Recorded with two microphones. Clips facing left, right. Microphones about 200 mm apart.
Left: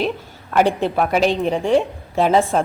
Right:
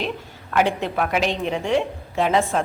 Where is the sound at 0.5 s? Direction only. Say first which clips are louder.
Left 4 dB; 35° left (ahead or behind).